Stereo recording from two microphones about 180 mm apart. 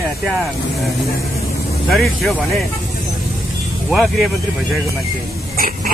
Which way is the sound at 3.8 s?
Centre (ahead or behind).